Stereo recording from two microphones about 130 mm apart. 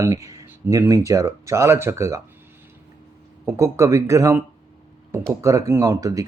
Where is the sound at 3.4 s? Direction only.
20° right (ahead or behind).